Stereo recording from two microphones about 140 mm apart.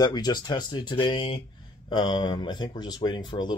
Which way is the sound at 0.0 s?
30° left (ahead or behind).